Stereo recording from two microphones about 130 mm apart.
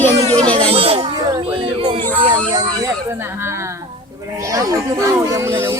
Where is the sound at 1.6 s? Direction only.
40° right (ahead or behind).